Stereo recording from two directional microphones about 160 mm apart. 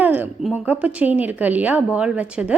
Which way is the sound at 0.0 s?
10° right (ahead or behind).